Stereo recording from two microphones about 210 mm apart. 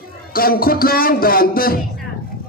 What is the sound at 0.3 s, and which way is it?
A man's voice, 45° left (ahead or behind).